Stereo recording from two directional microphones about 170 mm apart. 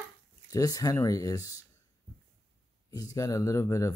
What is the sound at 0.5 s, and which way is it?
Speech, 20° left (ahead or behind).